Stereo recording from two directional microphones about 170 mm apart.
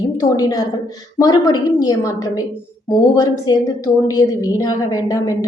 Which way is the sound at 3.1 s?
20° left (ahead or behind).